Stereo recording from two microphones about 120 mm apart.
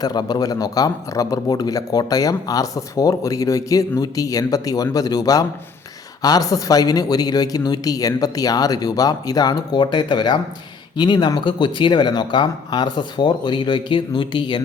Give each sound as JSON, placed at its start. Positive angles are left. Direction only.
{"t": 0.0, "sound": "a man's voice", "side_deg": 35}